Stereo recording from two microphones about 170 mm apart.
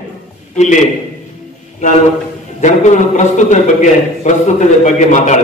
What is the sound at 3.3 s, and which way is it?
A man's voice, 45° left (ahead or behind).